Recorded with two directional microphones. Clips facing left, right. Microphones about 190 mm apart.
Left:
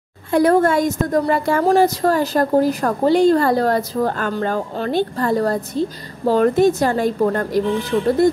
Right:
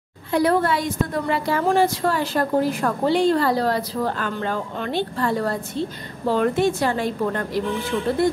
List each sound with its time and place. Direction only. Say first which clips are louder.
0.3 s a woman's voice: left 5 dB; 45° left (ahead or behind)